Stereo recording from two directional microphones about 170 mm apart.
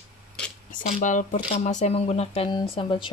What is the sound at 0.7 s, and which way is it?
Speech, 45° left (ahead or behind).